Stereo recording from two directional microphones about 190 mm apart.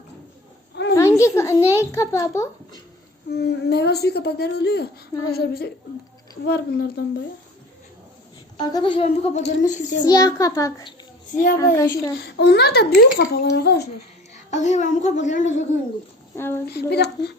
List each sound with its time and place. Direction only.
0.9 s a child's voice: 15° left (ahead or behind)
3.2 s a woman's voice: 60° left (ahead or behind)
8.5 s a woman's voice: 20° left (ahead or behind); by 9.9 s 40° left (ahead or behind)
10.0 s a child's voice: 20° left (ahead or behind)
12.4 s a woman's voice: 60° left (ahead or behind)
14.5 s a woman's voice: 40° left (ahead or behind)
16.3 s speech: 10° left (ahead or behind)
16.6 s a woman's voice: 60° left (ahead or behind)